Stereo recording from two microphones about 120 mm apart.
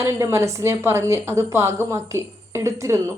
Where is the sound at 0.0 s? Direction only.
20° right (ahead or behind).